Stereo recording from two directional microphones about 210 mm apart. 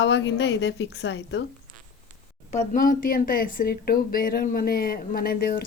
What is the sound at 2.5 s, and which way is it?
A woman's voice, 40° left (ahead or behind).